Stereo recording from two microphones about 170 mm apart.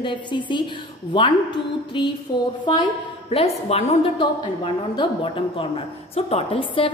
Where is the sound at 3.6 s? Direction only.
40° left (ahead or behind).